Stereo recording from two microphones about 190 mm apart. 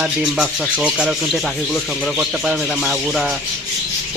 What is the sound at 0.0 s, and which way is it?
Speech, centre (ahead or behind).